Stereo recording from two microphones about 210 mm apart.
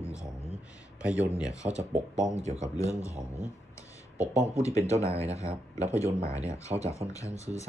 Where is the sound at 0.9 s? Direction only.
5° right (ahead or behind).